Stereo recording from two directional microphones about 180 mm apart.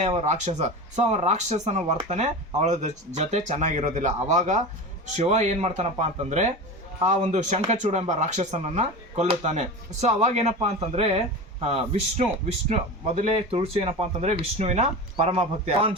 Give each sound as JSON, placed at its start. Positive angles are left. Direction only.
{"t": 0.0, "sound": "speech", "side_deg": -40}